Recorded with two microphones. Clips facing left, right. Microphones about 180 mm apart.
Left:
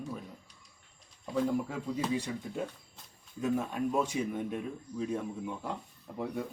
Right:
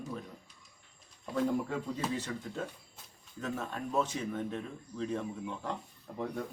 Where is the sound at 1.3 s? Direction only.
5° left (ahead or behind).